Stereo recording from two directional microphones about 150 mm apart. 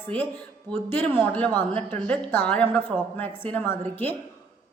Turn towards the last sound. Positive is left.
turn(degrees=15)  # may be behind; listen again after turning